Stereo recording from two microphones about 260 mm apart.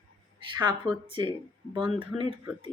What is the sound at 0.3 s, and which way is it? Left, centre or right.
A woman's voice, centre.